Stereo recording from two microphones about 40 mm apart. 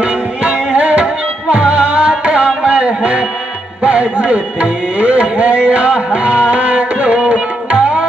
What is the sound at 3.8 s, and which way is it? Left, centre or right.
Tabla, right.